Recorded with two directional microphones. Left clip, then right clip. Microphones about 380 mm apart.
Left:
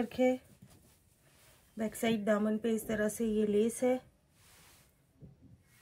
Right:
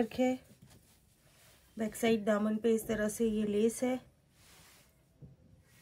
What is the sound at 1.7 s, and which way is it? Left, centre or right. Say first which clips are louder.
A woman's voice: right 2 dB; centre.